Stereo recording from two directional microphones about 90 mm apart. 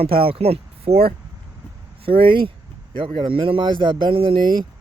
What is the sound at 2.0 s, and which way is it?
Speech, 75° right (ahead or behind).